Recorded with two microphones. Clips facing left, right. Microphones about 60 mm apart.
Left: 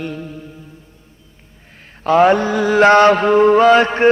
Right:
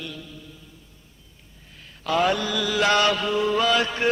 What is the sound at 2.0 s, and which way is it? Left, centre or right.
Mantra, left.